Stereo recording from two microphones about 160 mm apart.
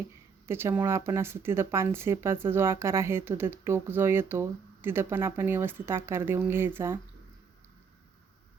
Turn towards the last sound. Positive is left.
turn(degrees=-15)  # may be behind; listen again after turning